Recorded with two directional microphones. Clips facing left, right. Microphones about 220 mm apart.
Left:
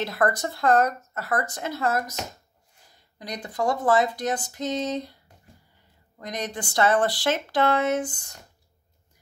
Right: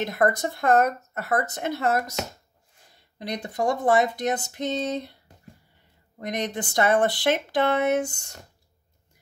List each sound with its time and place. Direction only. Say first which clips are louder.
0.0 s speech: right 2 dB; 20° right (ahead or behind)
3.2 s speech: right 1 dB; 25° right (ahead or behind)
6.1 s speech: right 3 dB; 25° right (ahead or behind)